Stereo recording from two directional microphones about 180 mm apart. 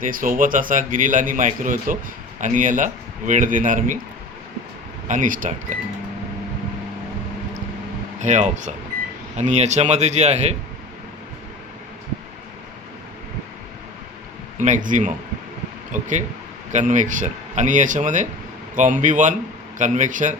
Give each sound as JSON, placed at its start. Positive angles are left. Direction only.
{"t": 0.0, "sound": "a man's voice", "side_deg": -50}
{"t": 5.0, "sound": "a man's voice", "side_deg": -45}
{"t": 8.2, "sound": "speech", "side_deg": -40}
{"t": 14.6, "sound": "a man's voice", "side_deg": -45}